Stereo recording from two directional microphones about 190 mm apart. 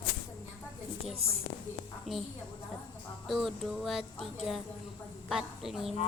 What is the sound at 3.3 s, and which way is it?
Speech, centre (ahead or behind).